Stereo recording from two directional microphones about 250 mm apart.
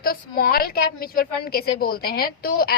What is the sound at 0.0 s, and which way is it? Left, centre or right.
A woman's voice, left.